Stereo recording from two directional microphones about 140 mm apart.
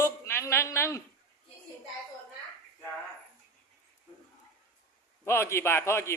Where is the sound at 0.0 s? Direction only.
20° left (ahead or behind).